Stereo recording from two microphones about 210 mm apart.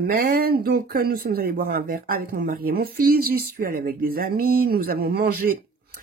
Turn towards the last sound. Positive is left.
turn(degrees=-50)  # may be behind; listen again after turning